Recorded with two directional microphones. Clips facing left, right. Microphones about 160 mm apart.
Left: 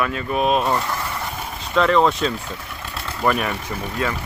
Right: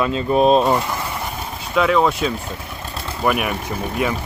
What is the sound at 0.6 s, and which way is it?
Speech, 15° right (ahead or behind).